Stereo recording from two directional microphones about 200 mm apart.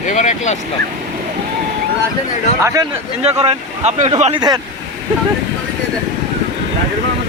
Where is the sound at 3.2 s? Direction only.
30° right (ahead or behind).